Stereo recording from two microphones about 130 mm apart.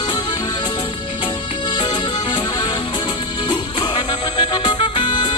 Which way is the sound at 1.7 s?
35° left (ahead or behind).